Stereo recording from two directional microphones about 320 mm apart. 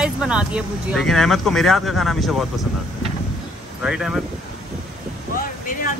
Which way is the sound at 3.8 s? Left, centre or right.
Centre.